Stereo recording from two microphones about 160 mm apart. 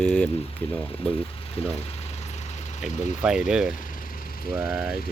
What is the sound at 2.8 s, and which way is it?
Speech, 5° right (ahead or behind).